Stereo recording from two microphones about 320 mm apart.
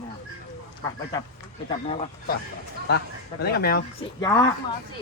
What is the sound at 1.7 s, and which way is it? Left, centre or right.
Speech, centre.